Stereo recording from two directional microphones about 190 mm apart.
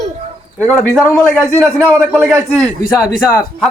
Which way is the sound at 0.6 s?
5° left (ahead or behind).